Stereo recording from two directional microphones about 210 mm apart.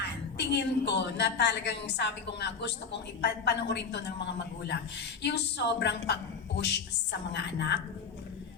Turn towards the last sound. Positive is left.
turn(degrees=55)  # may be behind; listen again after turning